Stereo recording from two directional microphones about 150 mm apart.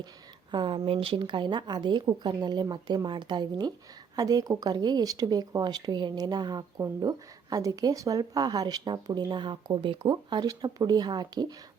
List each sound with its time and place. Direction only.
0.5 s speech: 35° right (ahead or behind)